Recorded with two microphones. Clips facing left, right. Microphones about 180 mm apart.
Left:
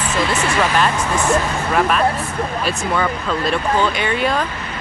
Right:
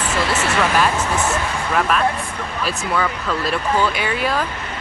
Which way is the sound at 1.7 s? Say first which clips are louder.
Left 2 dB; centre (ahead or behind).